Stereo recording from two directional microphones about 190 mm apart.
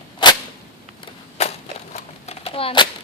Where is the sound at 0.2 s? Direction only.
25° left (ahead or behind).